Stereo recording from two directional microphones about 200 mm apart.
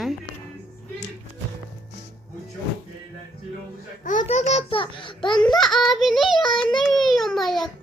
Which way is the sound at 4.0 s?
40° left (ahead or behind).